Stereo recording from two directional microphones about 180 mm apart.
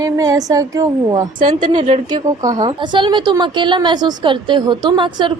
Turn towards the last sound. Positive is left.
turn(degrees=-25)  # may be behind; listen again after turning